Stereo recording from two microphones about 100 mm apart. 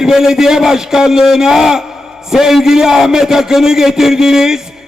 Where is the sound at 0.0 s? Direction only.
5° right (ahead or behind).